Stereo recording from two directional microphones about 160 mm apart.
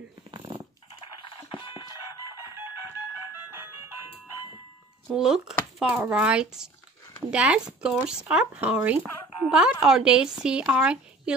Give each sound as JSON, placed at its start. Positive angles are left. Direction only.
{"t": 0.3, "sound": "dog", "side_deg": -30}
{"t": 1.5, "sound": "a sound", "side_deg": 30}
{"t": 5.1, "sound": "a woman's voice", "side_deg": -5}